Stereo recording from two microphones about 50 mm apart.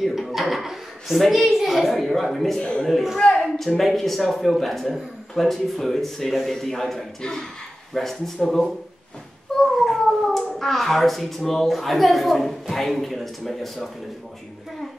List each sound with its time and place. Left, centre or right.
0.0 s a woman's voice: centre
2.6 s a man's voice: centre
2.9 s a man's voice: centre
3.2 s a man's voice: centre